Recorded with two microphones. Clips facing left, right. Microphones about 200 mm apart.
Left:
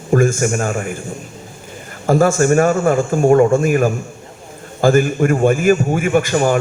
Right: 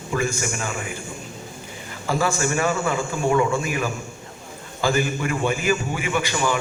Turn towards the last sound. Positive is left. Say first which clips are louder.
# left 9 dB
turn(degrees=50)  # may be behind; listen again after turning